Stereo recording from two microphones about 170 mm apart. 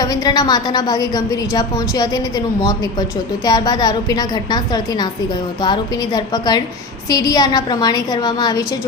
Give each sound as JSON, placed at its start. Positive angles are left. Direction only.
{"t": 0.0, "sound": "a woman's voice", "side_deg": 20}